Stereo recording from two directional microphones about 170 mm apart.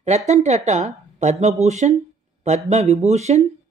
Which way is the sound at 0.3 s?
40° right (ahead or behind).